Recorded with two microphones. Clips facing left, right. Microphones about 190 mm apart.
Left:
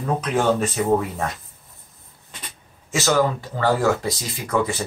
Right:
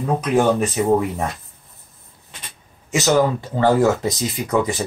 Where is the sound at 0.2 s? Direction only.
15° right (ahead or behind).